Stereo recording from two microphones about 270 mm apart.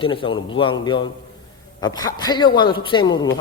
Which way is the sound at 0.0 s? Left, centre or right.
Centre.